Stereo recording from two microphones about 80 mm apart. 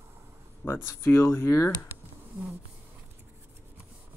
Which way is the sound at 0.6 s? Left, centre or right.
Left.